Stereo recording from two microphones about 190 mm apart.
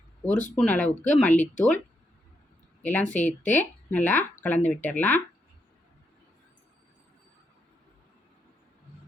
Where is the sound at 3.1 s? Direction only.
40° left (ahead or behind).